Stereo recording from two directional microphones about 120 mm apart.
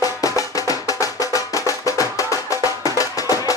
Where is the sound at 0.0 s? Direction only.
30° left (ahead or behind).